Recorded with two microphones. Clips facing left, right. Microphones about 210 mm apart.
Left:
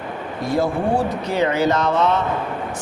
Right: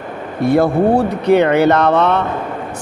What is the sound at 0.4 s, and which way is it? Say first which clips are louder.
Speech: right 8 dB; 60° right (ahead or behind).